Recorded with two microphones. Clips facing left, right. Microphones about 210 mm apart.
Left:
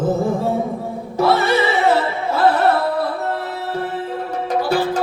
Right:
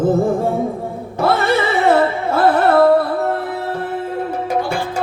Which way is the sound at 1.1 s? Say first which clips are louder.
Even; 55° right (ahead or behind).